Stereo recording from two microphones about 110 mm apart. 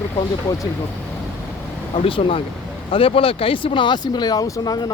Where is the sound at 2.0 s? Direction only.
50° left (ahead or behind).